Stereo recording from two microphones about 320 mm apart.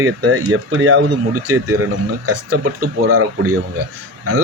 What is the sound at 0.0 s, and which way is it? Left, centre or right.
A man's voice, right.